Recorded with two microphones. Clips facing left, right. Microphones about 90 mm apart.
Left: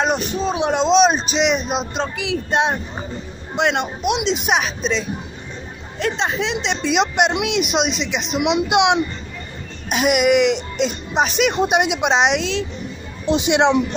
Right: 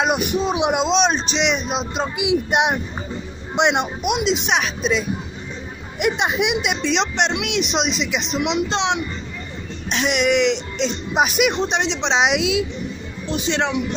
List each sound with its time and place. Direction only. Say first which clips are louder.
0.0 s speech: even; 10° right (ahead or behind)
0.8 s speech: left 4 dB; centre (ahead or behind)
2.1 s speech: right 2 dB; 15° right (ahead or behind)
4.1 s speech: left 1 dB; centre (ahead or behind)
5.9 s speech: right 1 dB; 15° right (ahead or behind)
6.8 s speech: left 6 dB; 5° left (ahead or behind)
8.5 s speech: left 5 dB; 15° left (ahead or behind); by 11.5 s 5° right (ahead or behind)
11.5 s speech: left 4 dB; 10° left (ahead or behind)
12.2 s speech: even; 5° right (ahead or behind)
13.2 s a man's voice: left 6 dB; 20° left (ahead or behind)